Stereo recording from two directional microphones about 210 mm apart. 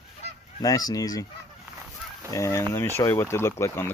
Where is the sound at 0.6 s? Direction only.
15° left (ahead or behind).